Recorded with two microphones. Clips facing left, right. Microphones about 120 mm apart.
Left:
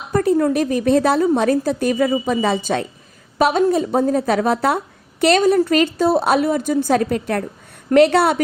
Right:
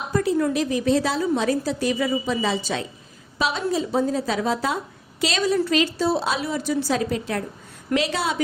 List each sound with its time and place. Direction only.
0.1 s a woman's voice: 50° left (ahead or behind)